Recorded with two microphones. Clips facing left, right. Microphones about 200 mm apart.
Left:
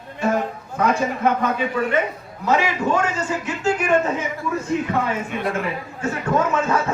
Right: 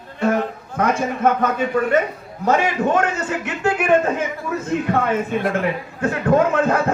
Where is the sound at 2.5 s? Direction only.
50° right (ahead or behind).